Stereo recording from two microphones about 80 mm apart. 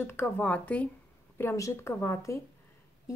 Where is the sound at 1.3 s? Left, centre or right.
Left.